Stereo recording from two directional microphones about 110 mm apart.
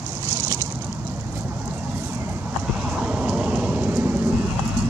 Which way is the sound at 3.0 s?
10° right (ahead or behind).